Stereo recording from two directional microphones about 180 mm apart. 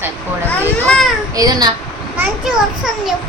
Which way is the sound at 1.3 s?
20° right (ahead or behind).